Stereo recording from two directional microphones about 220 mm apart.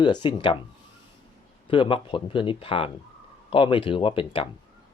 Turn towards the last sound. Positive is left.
turn(degrees=25)  # may be behind; listen again after turning